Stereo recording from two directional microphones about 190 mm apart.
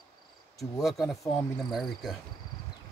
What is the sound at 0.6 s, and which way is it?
Speech, centre (ahead or behind).